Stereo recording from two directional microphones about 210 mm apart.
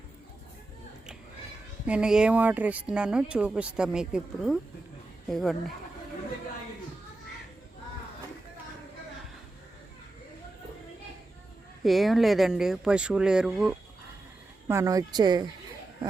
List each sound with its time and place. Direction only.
1.9 s speech: 5° right (ahead or behind)
11.8 s speech: centre (ahead or behind)
14.7 s speech: 15° right (ahead or behind)